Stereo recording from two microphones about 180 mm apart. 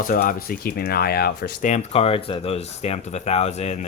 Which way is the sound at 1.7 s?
35° left (ahead or behind).